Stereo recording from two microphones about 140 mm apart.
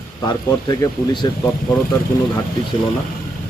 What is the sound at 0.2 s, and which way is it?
Speech, 25° left (ahead or behind).